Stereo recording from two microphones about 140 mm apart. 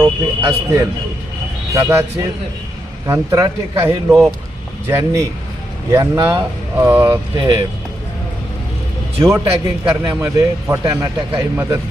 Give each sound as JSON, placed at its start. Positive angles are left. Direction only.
{"t": 0.0, "sound": "speech", "side_deg": -20}
{"t": 6.7, "sound": "speech", "side_deg": -15}
{"t": 7.3, "sound": "speech", "side_deg": -35}
{"t": 9.2, "sound": "speech", "side_deg": -20}